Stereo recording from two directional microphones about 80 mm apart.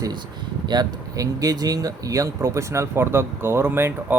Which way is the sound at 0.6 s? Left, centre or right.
Right.